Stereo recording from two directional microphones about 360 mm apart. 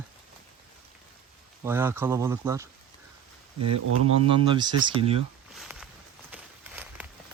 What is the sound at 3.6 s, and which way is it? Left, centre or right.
Speech, right.